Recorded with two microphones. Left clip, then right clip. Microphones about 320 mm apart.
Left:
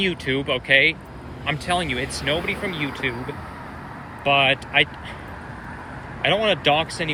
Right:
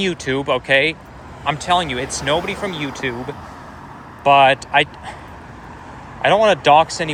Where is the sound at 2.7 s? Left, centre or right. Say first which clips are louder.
Right 2 dB; centre.